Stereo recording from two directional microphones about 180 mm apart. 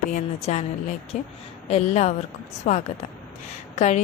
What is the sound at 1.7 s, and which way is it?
Speech, 35° left (ahead or behind).